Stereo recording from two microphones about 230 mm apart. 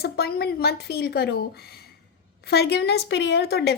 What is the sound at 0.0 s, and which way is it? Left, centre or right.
A woman's voice, left.